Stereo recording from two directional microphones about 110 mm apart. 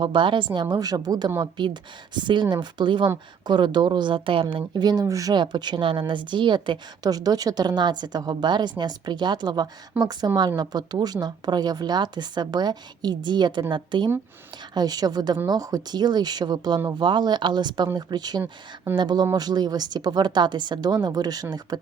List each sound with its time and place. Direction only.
0.0 s speech: 50° right (ahead or behind)